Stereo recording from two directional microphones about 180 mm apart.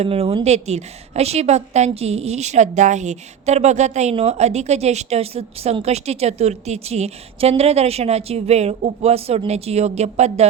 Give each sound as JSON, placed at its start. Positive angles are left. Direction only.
{"t": 0.0, "sound": "a woman's voice", "side_deg": -35}